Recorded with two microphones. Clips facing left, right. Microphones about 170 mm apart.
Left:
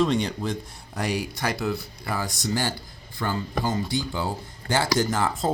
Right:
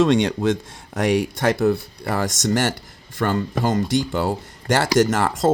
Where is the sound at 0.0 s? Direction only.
80° right.